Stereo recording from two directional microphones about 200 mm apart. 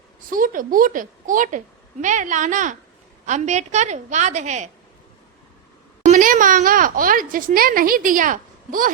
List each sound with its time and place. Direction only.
0.3 s a woman's voice: 45° right (ahead or behind)
6.1 s a woman's voice: 40° right (ahead or behind)